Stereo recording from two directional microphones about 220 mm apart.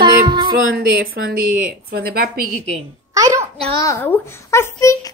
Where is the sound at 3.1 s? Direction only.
15° right (ahead or behind).